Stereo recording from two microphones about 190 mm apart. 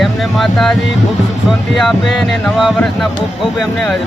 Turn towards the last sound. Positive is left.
turn(degrees=0)  # may be behind; listen again after turning